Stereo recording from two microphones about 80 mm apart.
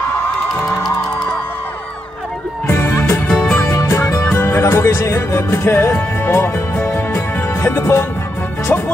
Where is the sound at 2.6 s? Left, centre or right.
Left.